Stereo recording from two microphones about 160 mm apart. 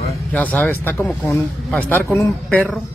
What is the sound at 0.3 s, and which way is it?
Speech, 10° left (ahead or behind).